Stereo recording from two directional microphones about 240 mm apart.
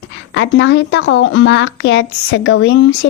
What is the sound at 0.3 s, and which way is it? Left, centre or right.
Speech, left.